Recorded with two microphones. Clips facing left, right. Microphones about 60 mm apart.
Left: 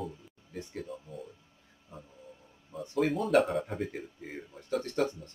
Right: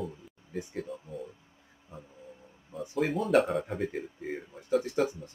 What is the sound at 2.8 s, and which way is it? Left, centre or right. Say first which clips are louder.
Speech: even; centre.